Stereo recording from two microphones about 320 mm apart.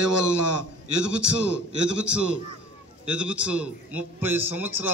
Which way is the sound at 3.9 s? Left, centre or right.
Right.